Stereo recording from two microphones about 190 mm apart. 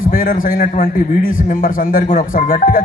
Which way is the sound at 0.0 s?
45° left (ahead or behind).